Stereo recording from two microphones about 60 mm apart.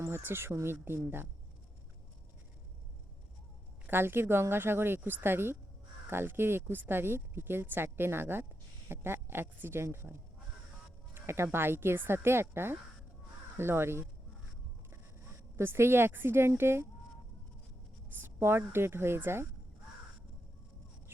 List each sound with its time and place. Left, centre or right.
0.2 s speech: right
3.8 s speech: right
11.1 s a sound: right
11.5 s speech: right
15.5 s speech: right
18.1 s speech: right